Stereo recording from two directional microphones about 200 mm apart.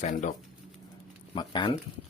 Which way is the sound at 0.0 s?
40° left (ahead or behind).